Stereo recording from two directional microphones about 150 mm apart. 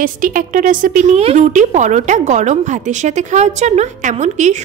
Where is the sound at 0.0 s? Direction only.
65° right (ahead or behind).